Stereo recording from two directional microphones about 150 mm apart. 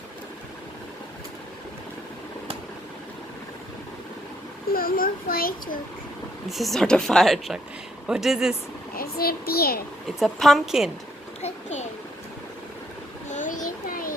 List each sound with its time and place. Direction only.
4.7 s a child's voice: 75° left (ahead or behind)
6.5 s speech: centre (ahead or behind)
9.0 s a child's voice: 90° left
10.2 s speech: centre (ahead or behind)
11.4 s a child's voice: 50° left (ahead or behind)
13.2 s a sound: 55° left (ahead or behind)